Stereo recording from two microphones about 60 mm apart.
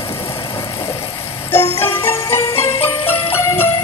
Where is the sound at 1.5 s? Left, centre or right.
Left.